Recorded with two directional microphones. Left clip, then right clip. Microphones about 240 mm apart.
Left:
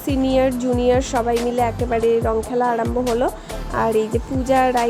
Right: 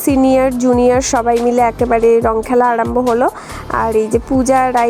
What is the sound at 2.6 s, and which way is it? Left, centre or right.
Music, right.